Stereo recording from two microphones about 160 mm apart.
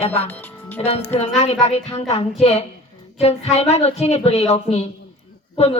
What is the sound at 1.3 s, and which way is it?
Speech, 45° left (ahead or behind).